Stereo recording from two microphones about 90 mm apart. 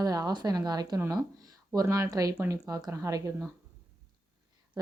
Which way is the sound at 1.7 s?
35° right (ahead or behind).